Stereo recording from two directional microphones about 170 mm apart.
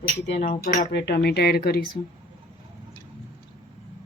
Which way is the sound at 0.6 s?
55° left (ahead or behind).